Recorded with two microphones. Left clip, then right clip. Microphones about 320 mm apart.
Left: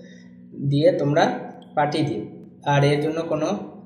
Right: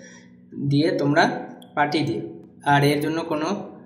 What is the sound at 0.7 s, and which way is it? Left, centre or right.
Speech, right.